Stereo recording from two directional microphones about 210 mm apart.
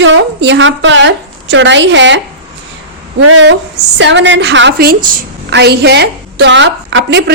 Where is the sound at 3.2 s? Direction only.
60° right (ahead or behind).